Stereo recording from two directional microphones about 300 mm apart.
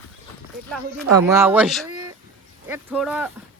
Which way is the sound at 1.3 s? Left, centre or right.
Centre.